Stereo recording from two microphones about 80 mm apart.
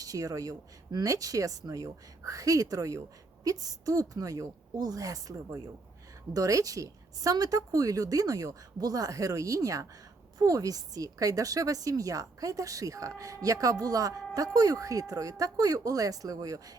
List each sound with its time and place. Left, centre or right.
0.0 s speech: right